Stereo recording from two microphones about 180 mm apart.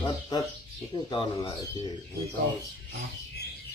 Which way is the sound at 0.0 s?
20° left (ahead or behind).